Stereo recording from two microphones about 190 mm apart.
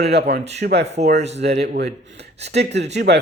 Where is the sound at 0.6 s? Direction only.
60° right (ahead or behind).